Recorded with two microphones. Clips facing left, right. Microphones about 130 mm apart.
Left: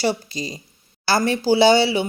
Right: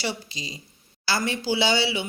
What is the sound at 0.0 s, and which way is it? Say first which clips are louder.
Speech: left 8 dB; 45° left (ahead or behind).